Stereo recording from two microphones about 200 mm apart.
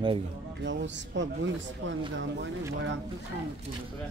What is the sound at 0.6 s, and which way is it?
Speech, 65° right (ahead or behind).